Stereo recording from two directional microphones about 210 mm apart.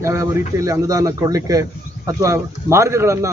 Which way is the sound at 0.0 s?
15° right (ahead or behind).